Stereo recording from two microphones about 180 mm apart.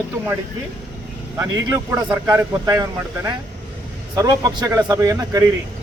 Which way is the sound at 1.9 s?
20° right (ahead or behind).